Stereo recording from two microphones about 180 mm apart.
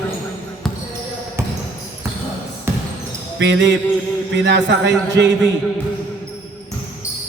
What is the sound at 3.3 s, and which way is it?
A man's voice, 85° right.